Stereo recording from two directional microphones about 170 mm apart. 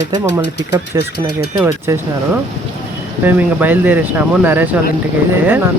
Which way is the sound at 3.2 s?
10° right (ahead or behind).